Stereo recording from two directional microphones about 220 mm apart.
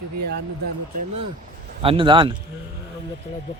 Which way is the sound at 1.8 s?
25° right (ahead or behind).